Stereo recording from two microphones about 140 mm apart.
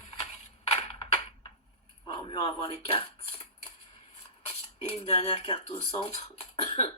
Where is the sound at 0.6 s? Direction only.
45° left (ahead or behind).